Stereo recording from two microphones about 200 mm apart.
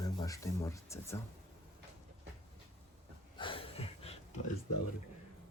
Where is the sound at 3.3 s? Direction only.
25° left (ahead or behind).